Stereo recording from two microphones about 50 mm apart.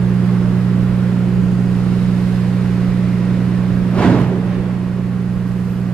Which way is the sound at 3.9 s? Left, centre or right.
Centre.